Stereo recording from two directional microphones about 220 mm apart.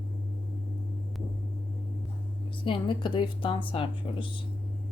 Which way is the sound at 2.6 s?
25° left (ahead or behind).